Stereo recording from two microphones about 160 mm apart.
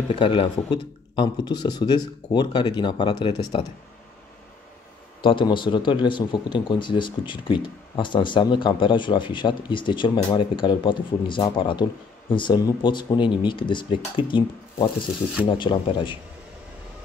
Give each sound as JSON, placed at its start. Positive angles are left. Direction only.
{"t": 0.1, "sound": "a man's voice", "side_deg": 30}
{"t": 5.2, "sound": "a man's voice", "side_deg": 30}